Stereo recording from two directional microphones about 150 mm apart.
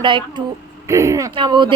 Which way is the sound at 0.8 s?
20° right (ahead or behind).